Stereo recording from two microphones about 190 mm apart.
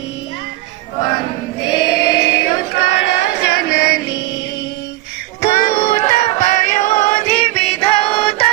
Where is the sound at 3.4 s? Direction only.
55° left (ahead or behind).